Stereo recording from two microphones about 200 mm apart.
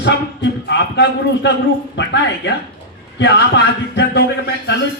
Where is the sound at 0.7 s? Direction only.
60° left (ahead or behind).